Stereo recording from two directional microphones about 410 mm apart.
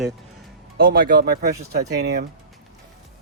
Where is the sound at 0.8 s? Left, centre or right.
Right.